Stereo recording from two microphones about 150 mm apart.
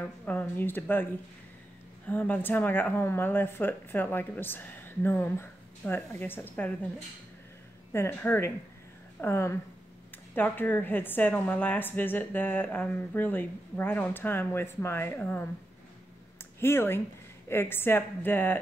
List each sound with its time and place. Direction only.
0.2 s a woman's voice: 10° left (ahead or behind)
2.0 s a woman's voice: 10° left (ahead or behind)
7.9 s a woman's voice: 15° left (ahead or behind)
16.5 s a woman's voice: 15° left (ahead or behind)